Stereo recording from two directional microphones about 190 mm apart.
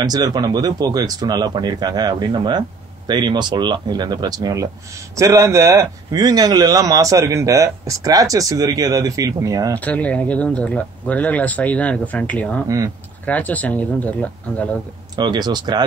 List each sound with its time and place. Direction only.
0.0 s a man's voice: 20° right (ahead or behind)
9.8 s speech: 10° left (ahead or behind)
12.6 s a man's voice: 15° right (ahead or behind)
13.2 s speech: 10° left (ahead or behind)
15.1 s speech: 20° right (ahead or behind)